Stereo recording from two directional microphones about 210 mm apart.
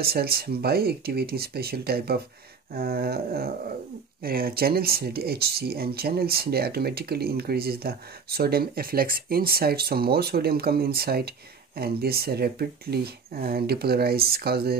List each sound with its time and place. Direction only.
0.0 s speech: 45° right (ahead or behind)